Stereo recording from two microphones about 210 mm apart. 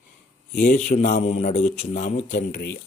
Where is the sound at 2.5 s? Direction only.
55° left (ahead or behind).